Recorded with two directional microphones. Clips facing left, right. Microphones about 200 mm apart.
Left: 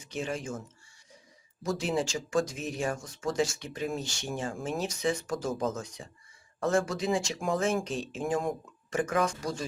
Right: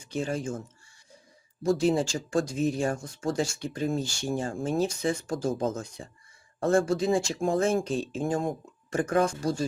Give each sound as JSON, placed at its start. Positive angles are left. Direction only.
{"t": 0.0, "sound": "speech", "side_deg": -35}
{"t": 1.6, "sound": "speech", "side_deg": -30}